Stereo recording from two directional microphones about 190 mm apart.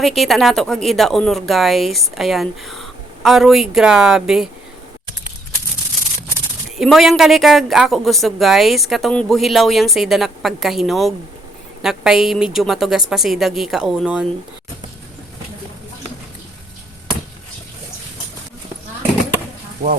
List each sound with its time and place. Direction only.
0.0 s speech: centre (ahead or behind)
6.7 s speech: centre (ahead or behind)
19.8 s speech: 50° right (ahead or behind)